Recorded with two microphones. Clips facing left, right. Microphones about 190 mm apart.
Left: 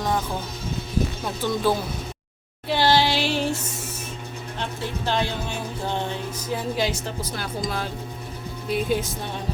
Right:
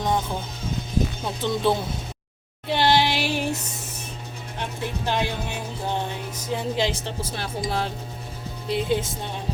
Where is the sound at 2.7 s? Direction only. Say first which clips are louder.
Even; 20° right (ahead or behind).